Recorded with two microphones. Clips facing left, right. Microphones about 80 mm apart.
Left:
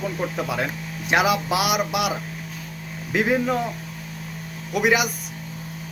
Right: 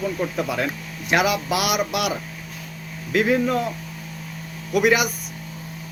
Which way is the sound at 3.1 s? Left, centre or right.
Centre.